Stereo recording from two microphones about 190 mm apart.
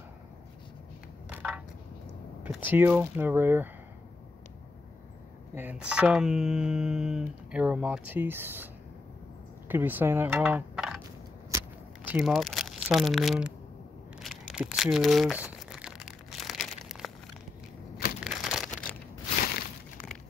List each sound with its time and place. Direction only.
1.3 s a sound: 5° right (ahead or behind)
2.4 s speech: 10° right (ahead or behind)
5.5 s a sound: 10° right (ahead or behind)
9.7 s speech: 10° right (ahead or behind)
11.5 s keys jangling: 10° right (ahead or behind)
12.3 s speech: centre (ahead or behind)
15.7 s crumpling: 5° right (ahead or behind)
18.2 s a sound: centre (ahead or behind)
19.4 s crumpling: 50° left (ahead or behind)